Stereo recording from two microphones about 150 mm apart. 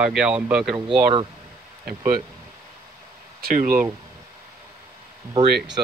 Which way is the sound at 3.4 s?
65° right (ahead or behind).